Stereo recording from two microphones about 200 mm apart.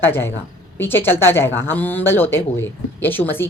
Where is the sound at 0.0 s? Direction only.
10° left (ahead or behind).